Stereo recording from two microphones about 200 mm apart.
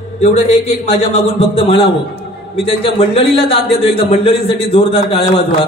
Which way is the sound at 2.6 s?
30° left (ahead or behind).